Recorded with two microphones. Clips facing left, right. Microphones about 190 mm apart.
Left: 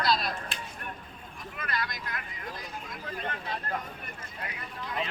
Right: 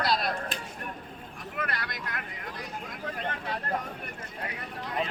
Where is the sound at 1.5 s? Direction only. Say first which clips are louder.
Even; 65° right (ahead or behind).